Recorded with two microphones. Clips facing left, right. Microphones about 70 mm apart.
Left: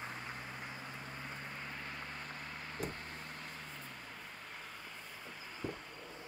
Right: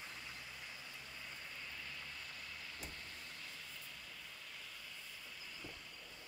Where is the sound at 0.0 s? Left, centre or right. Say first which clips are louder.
Left 7 dB; left.